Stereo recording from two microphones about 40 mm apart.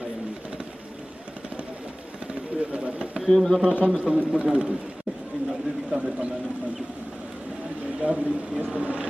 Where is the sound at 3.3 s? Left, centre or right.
Centre.